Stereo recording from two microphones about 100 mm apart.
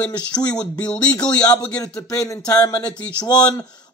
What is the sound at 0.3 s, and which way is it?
Speech, 40° left (ahead or behind).